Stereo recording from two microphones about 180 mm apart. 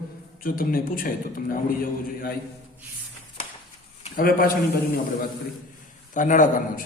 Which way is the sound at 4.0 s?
50° left (ahead or behind).